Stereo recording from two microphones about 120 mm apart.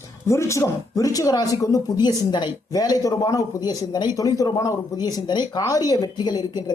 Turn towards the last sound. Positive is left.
turn(degrees=35)  # may be behind; listen again after turning